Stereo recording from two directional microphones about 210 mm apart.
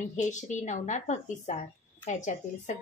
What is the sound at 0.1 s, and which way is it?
A woman's voice, 35° left (ahead or behind).